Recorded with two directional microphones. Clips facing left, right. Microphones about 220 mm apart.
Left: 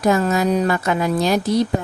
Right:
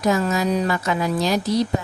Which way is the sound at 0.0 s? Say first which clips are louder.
Left 3 dB; 55° left (ahead or behind).